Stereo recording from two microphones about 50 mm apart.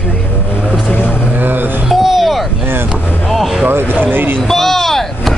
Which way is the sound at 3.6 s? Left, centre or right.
Right.